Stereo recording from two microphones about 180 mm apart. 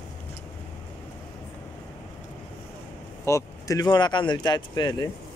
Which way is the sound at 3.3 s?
15° left (ahead or behind).